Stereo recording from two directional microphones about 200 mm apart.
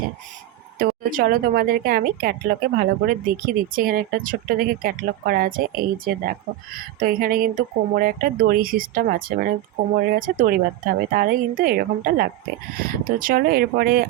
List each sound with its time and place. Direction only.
0.8 s a woman's voice: 45° right (ahead or behind)